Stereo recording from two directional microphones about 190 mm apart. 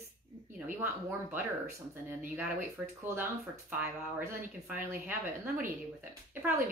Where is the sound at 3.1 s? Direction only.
10° right (ahead or behind).